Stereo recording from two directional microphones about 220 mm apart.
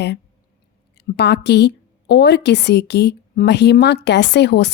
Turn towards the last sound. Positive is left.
turn(degrees=50)  # may be behind; listen again after turning